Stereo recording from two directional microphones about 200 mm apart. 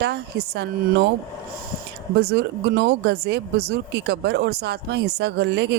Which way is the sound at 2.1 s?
55° right (ahead or behind).